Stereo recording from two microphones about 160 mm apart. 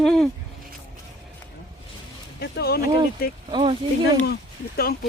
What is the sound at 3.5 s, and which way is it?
Speech, 30° right (ahead or behind).